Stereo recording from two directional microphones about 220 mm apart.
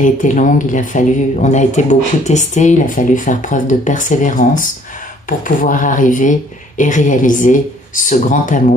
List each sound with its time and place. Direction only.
0.0 s speech: 35° left (ahead or behind)